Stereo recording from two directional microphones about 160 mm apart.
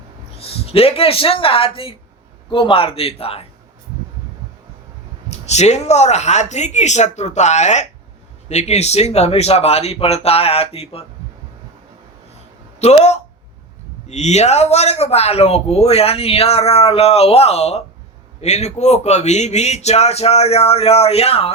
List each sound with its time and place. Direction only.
0.3 s speech: 35° left (ahead or behind)
5.3 s a man's voice: 45° left (ahead or behind)
12.8 s a man's voice: 40° left (ahead or behind)